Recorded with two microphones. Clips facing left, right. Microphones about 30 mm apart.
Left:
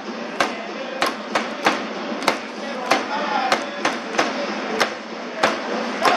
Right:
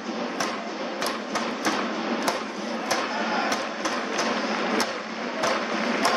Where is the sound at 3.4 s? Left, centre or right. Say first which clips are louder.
Left 6 dB; left.